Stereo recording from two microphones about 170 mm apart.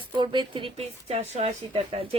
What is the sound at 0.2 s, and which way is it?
Speech, 30° right (ahead or behind).